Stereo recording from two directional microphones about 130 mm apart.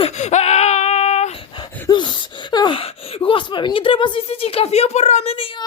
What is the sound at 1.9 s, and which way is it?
Gasp, 35° left (ahead or behind).